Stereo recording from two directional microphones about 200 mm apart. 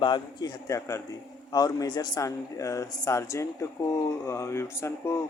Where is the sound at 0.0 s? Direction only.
20° left (ahead or behind).